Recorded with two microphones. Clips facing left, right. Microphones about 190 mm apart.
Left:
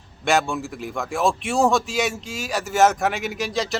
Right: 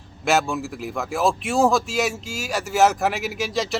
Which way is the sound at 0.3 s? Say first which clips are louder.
Even; centre (ahead or behind).